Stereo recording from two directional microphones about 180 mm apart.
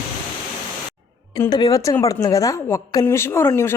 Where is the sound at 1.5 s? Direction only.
25° left (ahead or behind).